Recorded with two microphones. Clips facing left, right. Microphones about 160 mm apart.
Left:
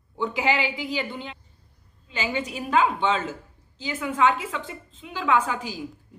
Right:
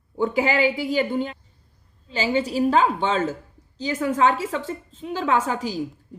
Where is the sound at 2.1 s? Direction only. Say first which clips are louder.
Right 6 dB; 30° right (ahead or behind).